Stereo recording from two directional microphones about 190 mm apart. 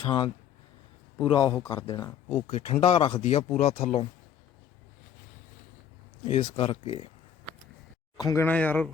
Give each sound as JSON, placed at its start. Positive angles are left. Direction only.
{"t": 0.0, "sound": "speech", "side_deg": 25}
{"t": 2.5, "sound": "speech", "side_deg": 35}
{"t": 6.2, "sound": "speech", "side_deg": 30}
{"t": 8.1, "sound": "speech", "side_deg": 20}
{"t": 8.4, "sound": "speech", "side_deg": 10}